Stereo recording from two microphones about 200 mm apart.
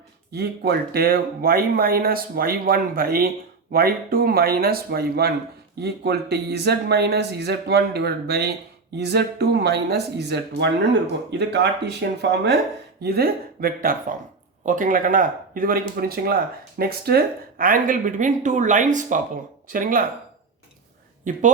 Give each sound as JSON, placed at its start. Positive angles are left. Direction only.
{"t": 0.3, "sound": "speech", "side_deg": -55}
{"t": 21.3, "sound": "a woman's voice", "side_deg": -40}